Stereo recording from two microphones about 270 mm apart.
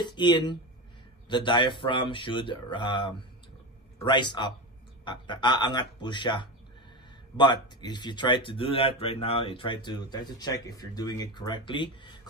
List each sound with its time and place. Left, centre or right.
0.0 s speech: centre